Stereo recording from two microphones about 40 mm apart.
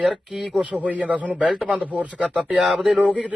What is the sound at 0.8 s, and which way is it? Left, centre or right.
Speech, right.